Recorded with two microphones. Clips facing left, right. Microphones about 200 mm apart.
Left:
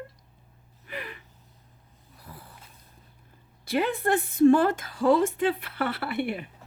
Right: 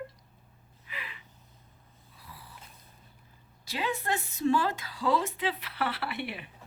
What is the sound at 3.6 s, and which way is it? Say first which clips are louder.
Speech: left 7 dB; 55° left (ahead or behind).